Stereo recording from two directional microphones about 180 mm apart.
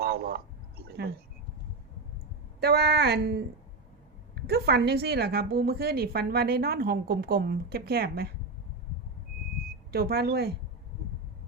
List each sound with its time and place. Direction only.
0.0 s a sound: 60° right (ahead or behind)
2.6 s a woman's voice: 60° right (ahead or behind)
4.4 s a woman's voice: 65° right (ahead or behind)
9.9 s a woman's voice: 60° right (ahead or behind)